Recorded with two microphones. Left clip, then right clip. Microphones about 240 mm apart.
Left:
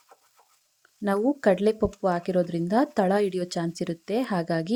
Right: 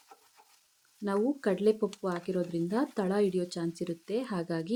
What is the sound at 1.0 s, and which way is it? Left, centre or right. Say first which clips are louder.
Speech: left 7 dB; left.